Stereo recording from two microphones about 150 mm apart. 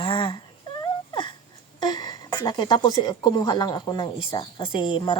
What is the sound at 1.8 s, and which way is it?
A woman's voice, 30° left (ahead or behind).